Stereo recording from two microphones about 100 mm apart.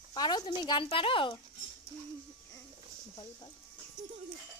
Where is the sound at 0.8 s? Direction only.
65° left (ahead or behind).